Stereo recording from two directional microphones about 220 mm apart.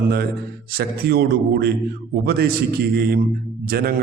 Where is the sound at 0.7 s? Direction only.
45° right (ahead or behind).